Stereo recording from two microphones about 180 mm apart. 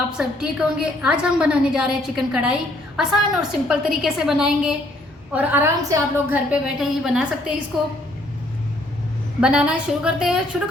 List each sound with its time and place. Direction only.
0.2 s a woman's voice: 5° right (ahead or behind)
9.4 s a woman's voice: 5° right (ahead or behind)